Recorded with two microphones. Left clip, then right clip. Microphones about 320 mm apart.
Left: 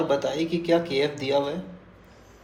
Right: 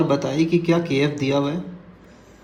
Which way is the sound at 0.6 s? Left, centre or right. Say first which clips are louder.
Right 2 dB; right.